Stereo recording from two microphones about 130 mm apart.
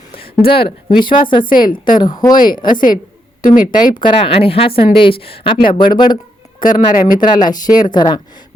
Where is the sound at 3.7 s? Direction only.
40° left (ahead or behind).